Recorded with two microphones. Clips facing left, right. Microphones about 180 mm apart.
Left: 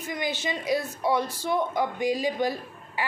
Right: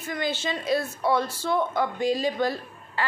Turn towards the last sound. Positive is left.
turn(degrees=15)  # may be behind; listen again after turning